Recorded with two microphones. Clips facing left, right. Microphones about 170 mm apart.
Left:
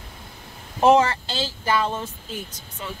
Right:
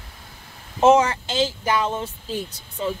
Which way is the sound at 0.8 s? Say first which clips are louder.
Right 1 dB; 20° right (ahead or behind).